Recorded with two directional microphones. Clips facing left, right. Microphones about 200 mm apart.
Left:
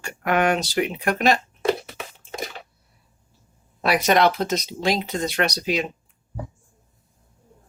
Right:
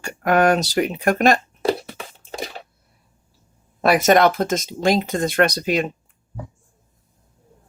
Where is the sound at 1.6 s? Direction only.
35° right (ahead or behind).